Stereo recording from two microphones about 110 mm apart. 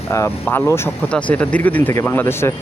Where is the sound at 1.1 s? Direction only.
10° left (ahead or behind).